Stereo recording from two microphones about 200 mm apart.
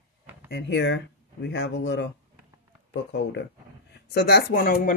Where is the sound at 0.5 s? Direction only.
60° left (ahead or behind).